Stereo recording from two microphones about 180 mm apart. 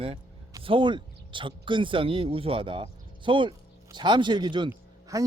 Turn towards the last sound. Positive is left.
turn(degrees=-20)  # may be behind; listen again after turning